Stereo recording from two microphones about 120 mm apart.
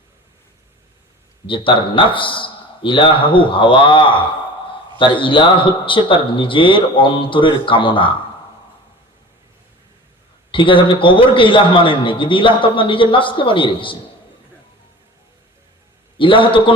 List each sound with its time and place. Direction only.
1.5 s a man's voice: 45° left (ahead or behind)
10.5 s a man's voice: 45° left (ahead or behind)
16.1 s a man's voice: 45° left (ahead or behind)